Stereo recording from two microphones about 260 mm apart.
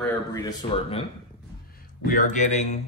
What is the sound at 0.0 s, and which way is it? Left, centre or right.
Speech, centre.